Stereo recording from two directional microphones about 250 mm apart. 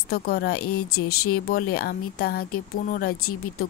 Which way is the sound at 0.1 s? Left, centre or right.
Left.